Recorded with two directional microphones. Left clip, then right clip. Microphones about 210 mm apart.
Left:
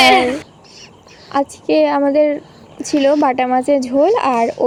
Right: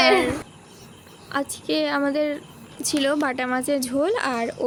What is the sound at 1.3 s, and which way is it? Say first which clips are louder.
A woman's voice: left 10 dB; 15° left (ahead or behind).